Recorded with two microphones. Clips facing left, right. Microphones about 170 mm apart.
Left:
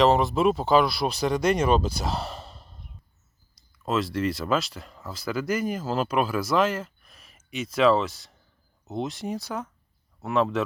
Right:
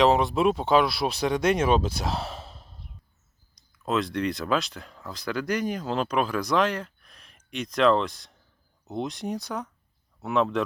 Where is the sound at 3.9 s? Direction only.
Centre (ahead or behind).